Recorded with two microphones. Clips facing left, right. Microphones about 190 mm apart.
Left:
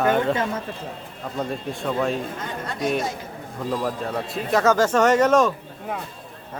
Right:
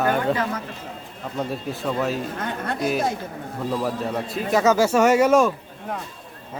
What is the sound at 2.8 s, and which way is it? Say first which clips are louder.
Speech: even; 5° right (ahead or behind).